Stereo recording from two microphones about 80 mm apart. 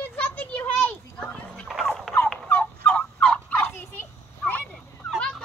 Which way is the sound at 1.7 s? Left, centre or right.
Centre.